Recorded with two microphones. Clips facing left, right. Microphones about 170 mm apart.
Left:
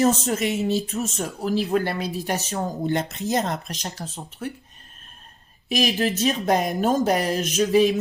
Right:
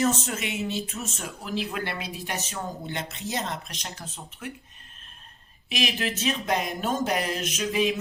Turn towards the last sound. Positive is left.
turn(degrees=40)  # may be behind; listen again after turning